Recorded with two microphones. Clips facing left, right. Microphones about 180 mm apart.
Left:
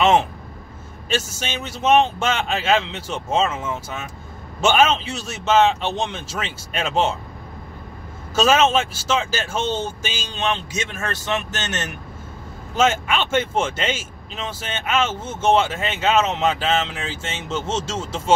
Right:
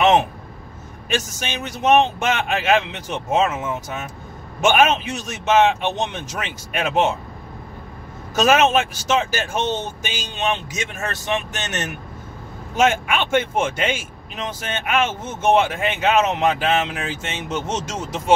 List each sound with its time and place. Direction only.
1.7 s speech: 15° right (ahead or behind)
8.5 s speech: 15° right (ahead or behind)